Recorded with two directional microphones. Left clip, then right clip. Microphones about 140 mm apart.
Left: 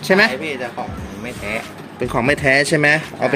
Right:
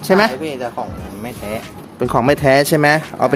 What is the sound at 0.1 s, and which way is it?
Speech, 15° right (ahead or behind).